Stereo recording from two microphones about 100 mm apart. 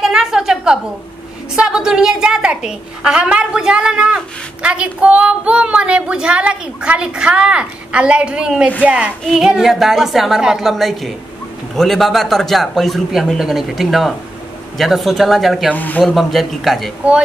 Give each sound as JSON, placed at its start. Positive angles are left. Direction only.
{"t": 0.0, "sound": "a sound", "side_deg": -5}
{"t": 1.5, "sound": "a woman's voice", "side_deg": -5}
{"t": 15.7, "sound": "speech", "side_deg": 15}
{"t": 16.0, "sound": "a man's voice", "side_deg": 0}